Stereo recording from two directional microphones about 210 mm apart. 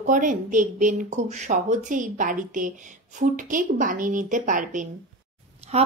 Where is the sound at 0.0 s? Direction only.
40° right (ahead or behind).